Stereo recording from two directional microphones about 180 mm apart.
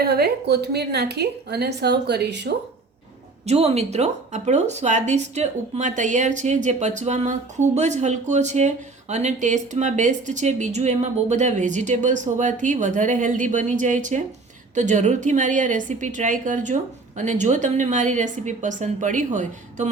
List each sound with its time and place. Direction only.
0.0 s a woman's voice: 60° right (ahead or behind)
3.4 s a woman's voice: 35° right (ahead or behind)